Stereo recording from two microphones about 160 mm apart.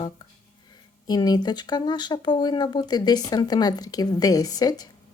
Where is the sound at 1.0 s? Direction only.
25° left (ahead or behind).